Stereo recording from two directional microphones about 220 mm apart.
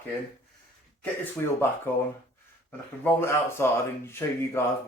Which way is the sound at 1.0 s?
10° left (ahead or behind).